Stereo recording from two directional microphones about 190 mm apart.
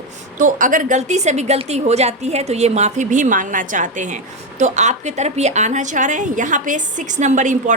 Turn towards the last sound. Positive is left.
turn(degrees=-40)  # may be behind; listen again after turning